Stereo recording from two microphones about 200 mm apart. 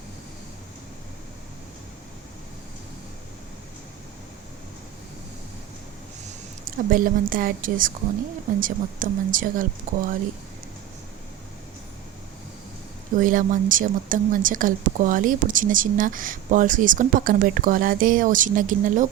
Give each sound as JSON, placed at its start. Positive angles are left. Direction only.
{"t": 6.7, "sound": "a woman's voice", "side_deg": -45}
{"t": 13.1, "sound": "speech", "side_deg": -40}